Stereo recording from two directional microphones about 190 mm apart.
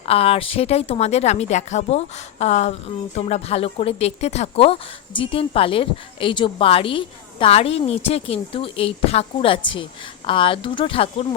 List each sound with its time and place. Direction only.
0.0 s speech: 30° left (ahead or behind)